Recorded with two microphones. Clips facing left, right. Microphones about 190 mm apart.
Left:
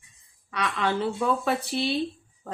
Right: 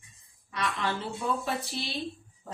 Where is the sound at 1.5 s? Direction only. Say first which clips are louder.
Left 7 dB; 60° left (ahead or behind).